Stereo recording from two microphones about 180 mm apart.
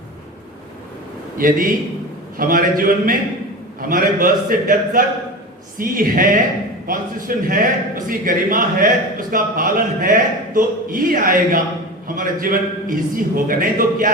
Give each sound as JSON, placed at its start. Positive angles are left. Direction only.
{"t": 1.4, "sound": "a man's voice", "side_deg": -50}